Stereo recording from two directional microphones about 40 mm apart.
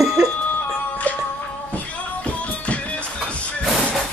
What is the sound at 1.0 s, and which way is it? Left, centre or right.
Music, left.